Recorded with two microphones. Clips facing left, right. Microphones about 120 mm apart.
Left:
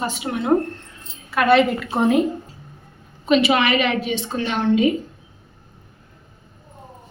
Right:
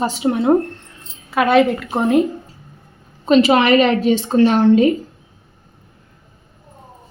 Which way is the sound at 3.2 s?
40° right (ahead or behind).